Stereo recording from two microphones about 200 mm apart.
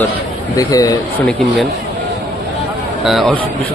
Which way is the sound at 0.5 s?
15° left (ahead or behind).